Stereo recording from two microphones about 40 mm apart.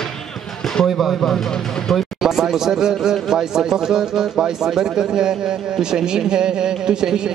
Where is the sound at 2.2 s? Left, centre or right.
Centre.